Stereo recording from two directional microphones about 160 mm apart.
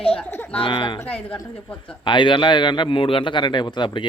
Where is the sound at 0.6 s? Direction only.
30° left (ahead or behind).